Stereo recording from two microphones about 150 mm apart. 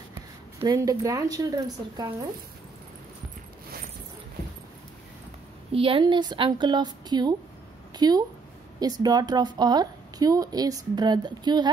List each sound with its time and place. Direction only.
0.7 s a woman's voice: 20° right (ahead or behind)
5.7 s a woman's voice: 35° right (ahead or behind)